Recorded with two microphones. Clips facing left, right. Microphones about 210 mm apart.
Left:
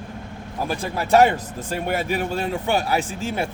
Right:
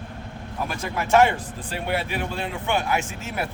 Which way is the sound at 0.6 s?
30° left (ahead or behind).